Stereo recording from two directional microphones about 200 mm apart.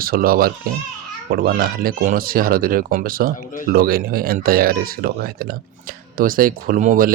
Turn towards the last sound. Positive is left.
turn(degrees=-40)  # may be behind; listen again after turning